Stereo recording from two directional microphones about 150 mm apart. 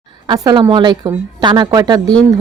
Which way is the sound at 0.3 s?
30° right (ahead or behind).